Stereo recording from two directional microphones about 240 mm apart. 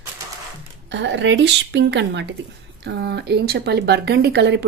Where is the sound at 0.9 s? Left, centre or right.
Right.